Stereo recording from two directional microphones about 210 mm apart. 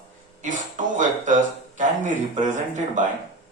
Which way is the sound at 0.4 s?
35° right (ahead or behind).